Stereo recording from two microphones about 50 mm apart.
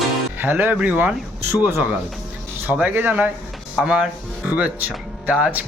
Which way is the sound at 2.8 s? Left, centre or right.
Right.